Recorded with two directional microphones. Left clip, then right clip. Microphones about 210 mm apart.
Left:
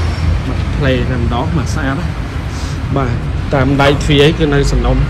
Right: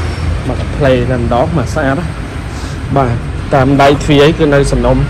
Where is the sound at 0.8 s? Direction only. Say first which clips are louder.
Right 6 dB; 5° left (ahead or behind).